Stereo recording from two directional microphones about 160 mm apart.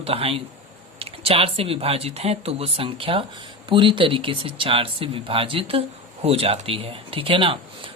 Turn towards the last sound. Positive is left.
turn(degrees=-30)  # may be behind; listen again after turning